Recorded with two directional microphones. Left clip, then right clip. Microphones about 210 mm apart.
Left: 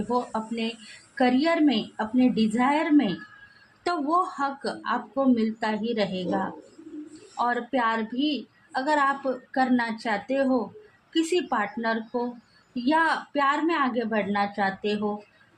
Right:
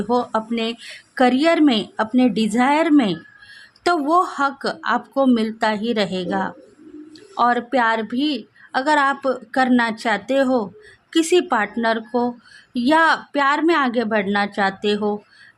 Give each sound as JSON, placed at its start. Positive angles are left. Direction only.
{"t": 0.1, "sound": "a woman's voice", "side_deg": -45}